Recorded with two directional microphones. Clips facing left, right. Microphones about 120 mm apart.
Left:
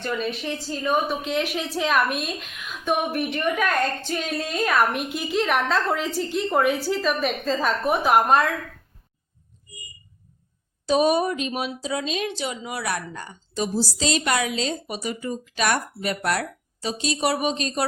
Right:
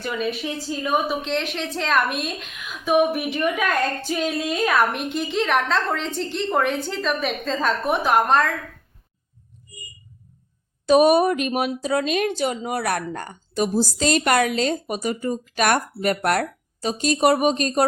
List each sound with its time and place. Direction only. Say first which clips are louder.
0.0 s a woman's voice: right 1 dB; 5° right (ahead or behind)
1.3 s a woman's voice: even; 5° left (ahead or behind)
10.8 s a woman's voice: right 5 dB; 60° right (ahead or behind)